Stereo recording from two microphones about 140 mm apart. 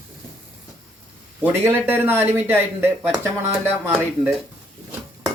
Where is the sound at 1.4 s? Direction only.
15° right (ahead or behind).